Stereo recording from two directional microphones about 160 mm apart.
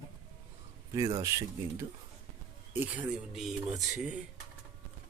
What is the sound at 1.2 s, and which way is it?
Speech, 20° right (ahead or behind).